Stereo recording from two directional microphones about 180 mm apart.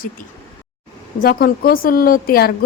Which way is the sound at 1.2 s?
55° left (ahead or behind).